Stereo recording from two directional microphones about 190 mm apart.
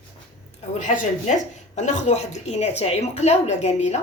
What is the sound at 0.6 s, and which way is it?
Speech, 40° left (ahead or behind).